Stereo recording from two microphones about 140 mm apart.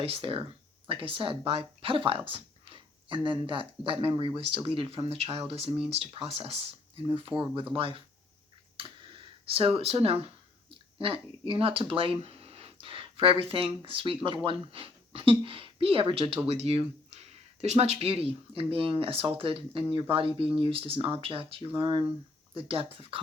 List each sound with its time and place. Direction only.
0.0 s speech: 40° right (ahead or behind)
8.8 s a sound: 40° right (ahead or behind)
11.0 s speech: 40° right (ahead or behind)